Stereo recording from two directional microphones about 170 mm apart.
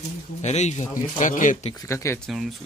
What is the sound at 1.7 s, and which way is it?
Speech, 15° left (ahead or behind).